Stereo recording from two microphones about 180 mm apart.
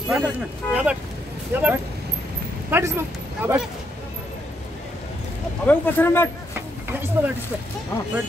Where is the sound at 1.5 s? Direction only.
10° right (ahead or behind).